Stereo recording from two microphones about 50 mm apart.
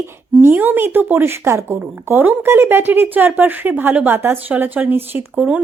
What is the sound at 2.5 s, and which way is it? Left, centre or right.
A woman's voice, right.